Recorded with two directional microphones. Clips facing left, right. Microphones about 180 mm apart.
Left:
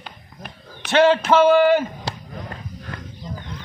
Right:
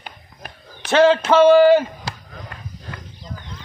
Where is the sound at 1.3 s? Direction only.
35° right (ahead or behind).